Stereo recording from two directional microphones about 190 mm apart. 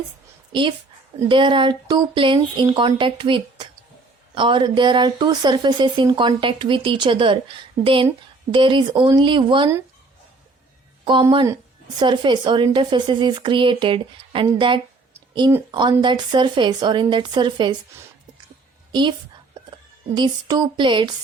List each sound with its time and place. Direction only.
1.3 s speech: 25° right (ahead or behind)
11.0 s speech: 25° right (ahead or behind)
18.9 s a woman's voice: 25° right (ahead or behind)
20.1 s speech: 25° right (ahead or behind)